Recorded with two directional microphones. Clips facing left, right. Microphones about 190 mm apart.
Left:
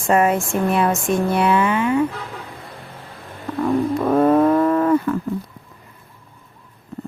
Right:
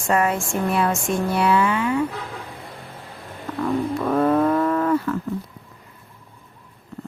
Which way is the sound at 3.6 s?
30° left (ahead or behind).